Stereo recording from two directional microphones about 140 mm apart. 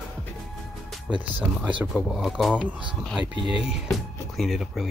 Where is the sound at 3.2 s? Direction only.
40° left (ahead or behind).